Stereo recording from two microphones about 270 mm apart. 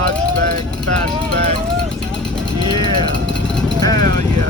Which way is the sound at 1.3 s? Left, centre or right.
Right.